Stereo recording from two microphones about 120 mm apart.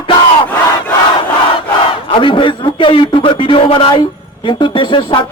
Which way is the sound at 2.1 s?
45° left (ahead or behind).